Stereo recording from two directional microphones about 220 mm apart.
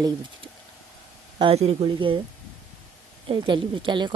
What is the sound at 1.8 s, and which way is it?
Speech, 25° right (ahead or behind).